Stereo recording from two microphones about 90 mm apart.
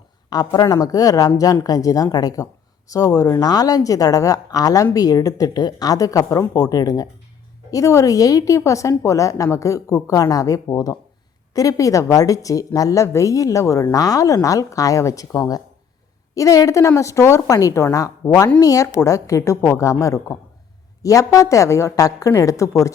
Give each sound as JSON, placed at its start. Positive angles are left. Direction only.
{"t": 0.3, "sound": "a woman's voice", "side_deg": 45}